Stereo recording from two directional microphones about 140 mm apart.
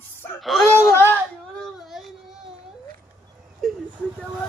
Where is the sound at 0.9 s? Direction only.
15° left (ahead or behind).